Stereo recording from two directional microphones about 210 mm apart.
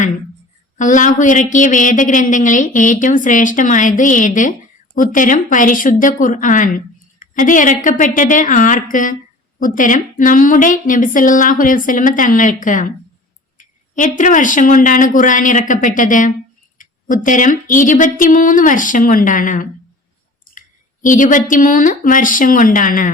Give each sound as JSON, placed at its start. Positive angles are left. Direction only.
{"t": 0.8, "sound": "speech", "side_deg": 35}